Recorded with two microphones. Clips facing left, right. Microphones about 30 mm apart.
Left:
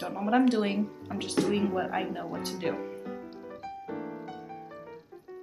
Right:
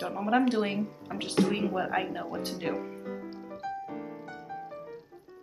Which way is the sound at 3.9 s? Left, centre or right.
Centre.